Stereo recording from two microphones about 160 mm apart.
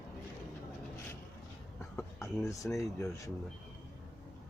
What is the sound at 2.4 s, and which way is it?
Speech, 20° left (ahead or behind).